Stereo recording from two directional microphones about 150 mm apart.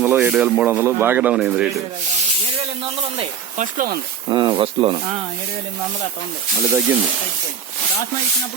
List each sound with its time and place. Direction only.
0.2 s speech: 5° right (ahead or behind)
3.6 s speech: 60° right (ahead or behind)
4.3 s speech: 30° right (ahead or behind)
6.7 s speech: 15° right (ahead or behind)